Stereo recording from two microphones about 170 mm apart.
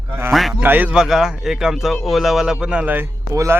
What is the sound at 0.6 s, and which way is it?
A man's voice, 10° right (ahead or behind).